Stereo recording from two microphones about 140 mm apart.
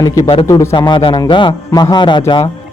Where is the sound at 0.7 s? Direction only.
35° left (ahead or behind).